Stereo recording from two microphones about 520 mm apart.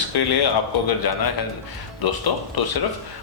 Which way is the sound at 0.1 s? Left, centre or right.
Left.